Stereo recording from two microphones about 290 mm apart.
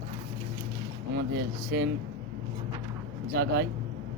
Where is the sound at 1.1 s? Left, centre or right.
Right.